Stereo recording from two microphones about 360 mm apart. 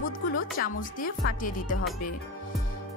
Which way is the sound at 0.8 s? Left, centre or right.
Left.